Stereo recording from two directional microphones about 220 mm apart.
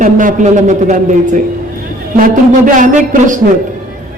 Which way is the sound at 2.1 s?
35° right (ahead or behind).